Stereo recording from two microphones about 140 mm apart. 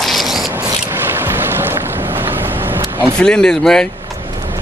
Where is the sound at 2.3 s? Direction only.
15° right (ahead or behind).